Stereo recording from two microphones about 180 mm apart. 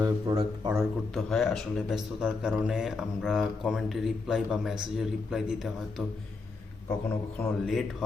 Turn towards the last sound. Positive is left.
turn(degrees=0)  # may be behind; listen again after turning